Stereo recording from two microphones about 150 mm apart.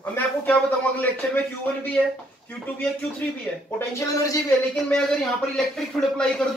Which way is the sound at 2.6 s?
10° left (ahead or behind).